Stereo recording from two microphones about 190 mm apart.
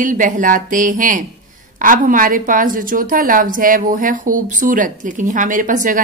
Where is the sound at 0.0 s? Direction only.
45° right (ahead or behind).